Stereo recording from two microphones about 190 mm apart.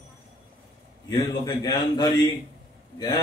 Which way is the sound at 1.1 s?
20° left (ahead or behind).